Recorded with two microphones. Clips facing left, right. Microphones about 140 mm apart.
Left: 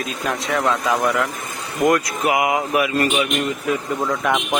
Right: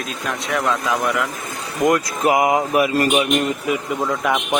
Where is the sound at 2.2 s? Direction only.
40° right (ahead or behind).